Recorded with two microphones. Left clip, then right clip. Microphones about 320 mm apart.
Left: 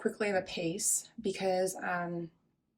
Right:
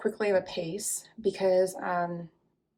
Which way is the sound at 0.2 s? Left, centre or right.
Centre.